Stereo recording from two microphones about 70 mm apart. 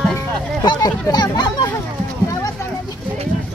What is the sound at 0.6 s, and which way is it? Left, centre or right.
Speech, left.